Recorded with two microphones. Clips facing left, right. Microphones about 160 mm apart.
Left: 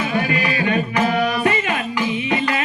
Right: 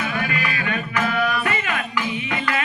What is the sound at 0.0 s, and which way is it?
Music, 25° left (ahead or behind).